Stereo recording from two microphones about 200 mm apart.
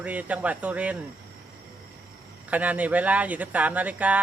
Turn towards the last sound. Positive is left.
turn(degrees=-5)  # may be behind; listen again after turning